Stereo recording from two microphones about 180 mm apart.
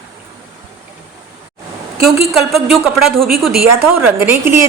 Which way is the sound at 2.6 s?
Centre (ahead or behind).